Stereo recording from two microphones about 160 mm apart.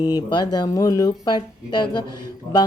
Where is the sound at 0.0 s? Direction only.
25° left (ahead or behind).